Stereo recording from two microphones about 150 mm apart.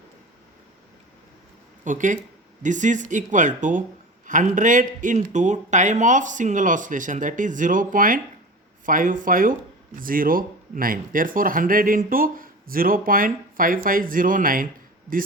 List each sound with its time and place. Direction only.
1.8 s speech: 60° right (ahead or behind)